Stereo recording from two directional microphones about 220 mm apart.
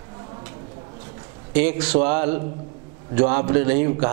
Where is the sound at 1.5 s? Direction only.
10° right (ahead or behind).